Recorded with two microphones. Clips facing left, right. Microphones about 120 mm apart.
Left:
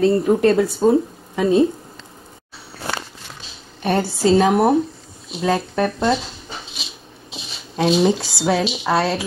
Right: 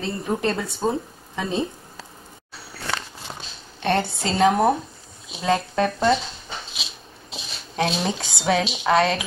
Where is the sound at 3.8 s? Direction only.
5° left (ahead or behind).